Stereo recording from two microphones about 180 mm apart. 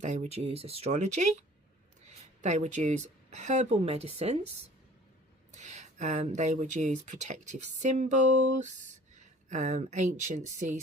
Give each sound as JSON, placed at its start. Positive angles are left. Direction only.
{"t": 0.0, "sound": "speech", "side_deg": -40}
{"t": 2.4, "sound": "speech", "side_deg": -40}
{"t": 5.5, "sound": "speech", "side_deg": -40}